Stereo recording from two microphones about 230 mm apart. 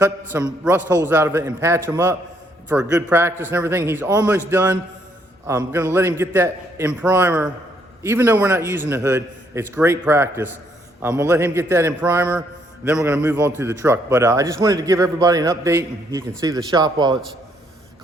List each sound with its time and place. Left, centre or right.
0.3 s a man's voice: centre